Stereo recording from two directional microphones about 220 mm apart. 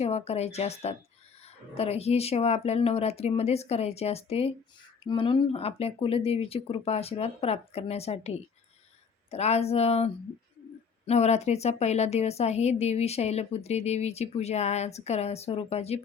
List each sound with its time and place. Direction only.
0.0 s speech: 30° left (ahead or behind)